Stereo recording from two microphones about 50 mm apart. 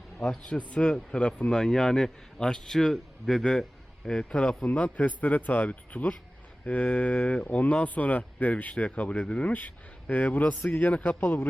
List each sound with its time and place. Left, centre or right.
0.4 s mantra: left
1.4 s a man's voice: centre
4.2 s mantra: centre
4.6 s speech: left
6.7 s mantra: left
7.9 s speech: left
8.8 s mantra: left
9.3 s speech: left
11.2 s a man's voice: left